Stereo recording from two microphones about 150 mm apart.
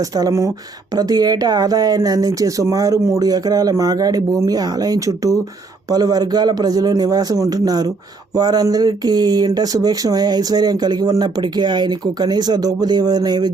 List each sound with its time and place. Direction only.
0.0 s speech: 25° right (ahead or behind)